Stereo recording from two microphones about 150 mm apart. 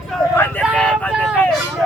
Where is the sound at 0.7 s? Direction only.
10° left (ahead or behind).